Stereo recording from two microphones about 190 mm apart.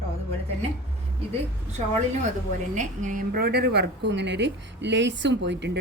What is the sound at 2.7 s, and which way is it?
A woman's voice, 40° right (ahead or behind).